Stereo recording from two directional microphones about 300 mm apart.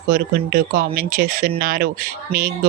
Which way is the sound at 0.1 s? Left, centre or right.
Right.